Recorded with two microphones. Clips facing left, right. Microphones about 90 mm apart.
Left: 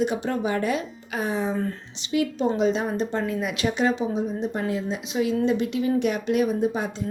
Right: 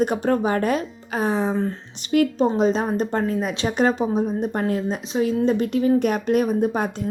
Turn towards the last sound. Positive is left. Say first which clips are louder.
# right 3 dB
turn(degrees=-55)  # may be behind; listen again after turning